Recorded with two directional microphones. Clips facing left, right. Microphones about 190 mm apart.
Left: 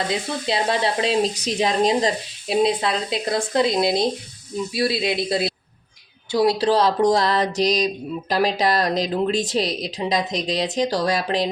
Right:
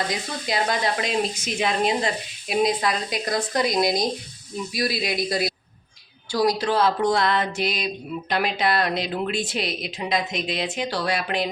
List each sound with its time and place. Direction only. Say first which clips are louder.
0.1 s a woman's voice: left 4 dB; 30° left (ahead or behind)